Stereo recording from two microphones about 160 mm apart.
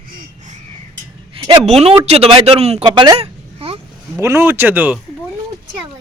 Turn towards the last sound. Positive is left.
turn(degrees=-10)  # may be behind; listen again after turning